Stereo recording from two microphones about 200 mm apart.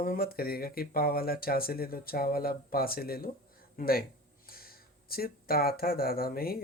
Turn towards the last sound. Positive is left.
turn(degrees=50)  # may be behind; listen again after turning